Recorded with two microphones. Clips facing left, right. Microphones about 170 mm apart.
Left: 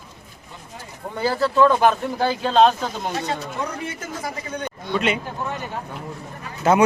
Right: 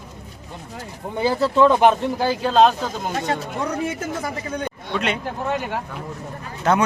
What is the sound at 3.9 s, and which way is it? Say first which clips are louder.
Speech: right 4 dB; 50° right (ahead or behind).